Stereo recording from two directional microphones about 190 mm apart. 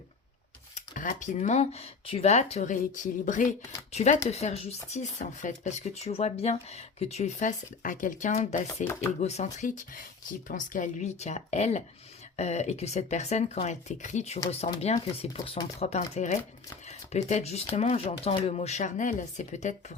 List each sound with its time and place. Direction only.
0.8 s speech: 40° left (ahead or behind)